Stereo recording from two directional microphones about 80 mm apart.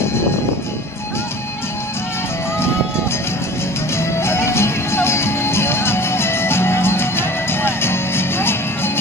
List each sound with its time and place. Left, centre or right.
4.0 s music: left